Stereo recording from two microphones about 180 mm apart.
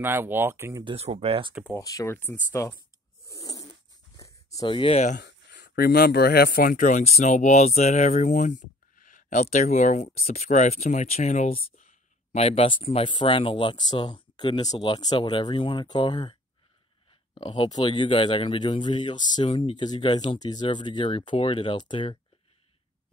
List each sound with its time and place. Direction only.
0.0 s speech: 10° right (ahead or behind)
0.8 s speech: 35° right (ahead or behind)
1.7 s speech: 20° left (ahead or behind)
3.3 s cat: 20° left (ahead or behind)
4.2 s a sound: 20° left (ahead or behind)
5.2 s speech: 60° left (ahead or behind); by 22.2 s 25° left (ahead or behind)